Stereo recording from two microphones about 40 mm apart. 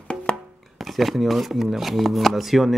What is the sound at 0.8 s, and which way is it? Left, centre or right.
Speech, centre.